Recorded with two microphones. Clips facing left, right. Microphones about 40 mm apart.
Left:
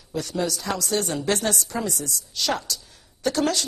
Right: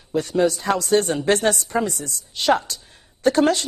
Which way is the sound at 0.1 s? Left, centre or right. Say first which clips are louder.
Right 7 dB; right.